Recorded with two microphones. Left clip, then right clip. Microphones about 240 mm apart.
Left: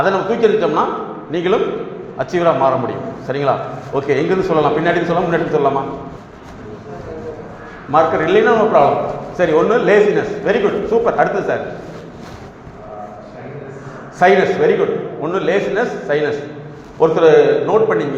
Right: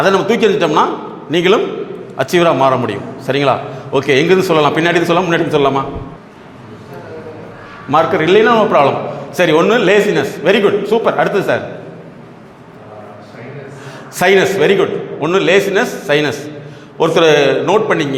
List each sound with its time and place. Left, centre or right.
0.0 s a man's voice: right
7.9 s a man's voice: right
14.2 s a man's voice: right